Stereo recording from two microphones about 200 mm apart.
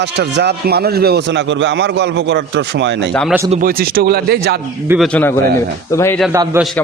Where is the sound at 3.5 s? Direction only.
45° right (ahead or behind).